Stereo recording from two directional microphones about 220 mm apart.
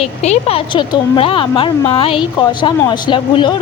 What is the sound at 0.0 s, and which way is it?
Speech, 30° left (ahead or behind).